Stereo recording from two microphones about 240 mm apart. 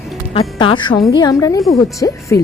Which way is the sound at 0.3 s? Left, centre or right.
Centre.